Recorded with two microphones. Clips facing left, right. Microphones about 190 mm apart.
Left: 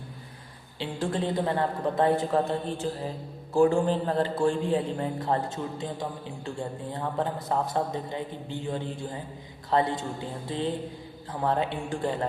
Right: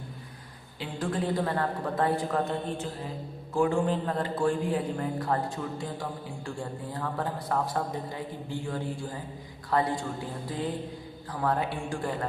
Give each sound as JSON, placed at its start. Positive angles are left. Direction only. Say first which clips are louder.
{"t": 0.8, "sound": "a man's voice", "louder": "left 2 dB", "side_deg": 25}